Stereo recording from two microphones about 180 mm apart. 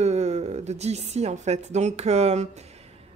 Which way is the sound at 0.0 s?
40° right (ahead or behind).